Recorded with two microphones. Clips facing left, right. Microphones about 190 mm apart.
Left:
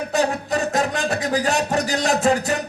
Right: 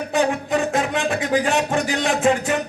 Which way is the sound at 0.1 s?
40° left (ahead or behind).